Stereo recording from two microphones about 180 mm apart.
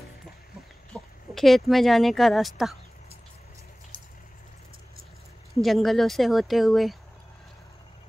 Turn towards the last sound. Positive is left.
turn(degrees=0)  # may be behind; listen again after turning